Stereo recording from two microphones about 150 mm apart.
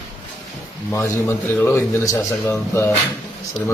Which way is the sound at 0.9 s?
15° left (ahead or behind).